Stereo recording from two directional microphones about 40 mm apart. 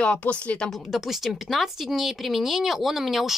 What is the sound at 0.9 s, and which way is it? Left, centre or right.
Speech, centre.